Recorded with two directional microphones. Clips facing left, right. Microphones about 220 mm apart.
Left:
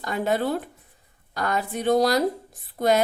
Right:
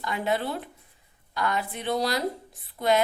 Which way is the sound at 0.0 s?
45° left (ahead or behind).